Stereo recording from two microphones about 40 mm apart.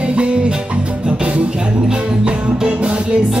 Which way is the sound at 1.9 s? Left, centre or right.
Right.